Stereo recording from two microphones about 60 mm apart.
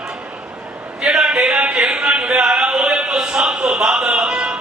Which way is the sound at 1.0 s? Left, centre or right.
Centre.